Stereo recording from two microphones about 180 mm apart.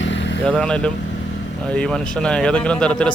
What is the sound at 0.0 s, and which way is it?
Vehicle, 90° left.